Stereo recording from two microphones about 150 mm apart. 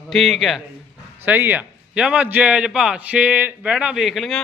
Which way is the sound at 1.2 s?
10° right (ahead or behind).